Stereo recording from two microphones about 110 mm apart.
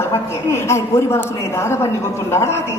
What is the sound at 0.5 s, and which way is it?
A man's voice, 25° left (ahead or behind).